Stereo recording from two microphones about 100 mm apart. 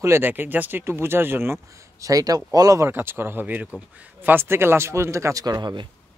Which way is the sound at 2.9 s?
20° right (ahead or behind).